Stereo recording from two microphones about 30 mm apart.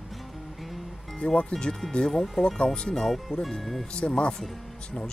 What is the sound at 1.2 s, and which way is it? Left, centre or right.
Speech, left.